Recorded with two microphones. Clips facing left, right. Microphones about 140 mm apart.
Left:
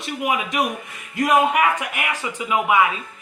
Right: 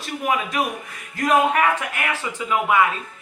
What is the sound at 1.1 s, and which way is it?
Speech, 15° left (ahead or behind).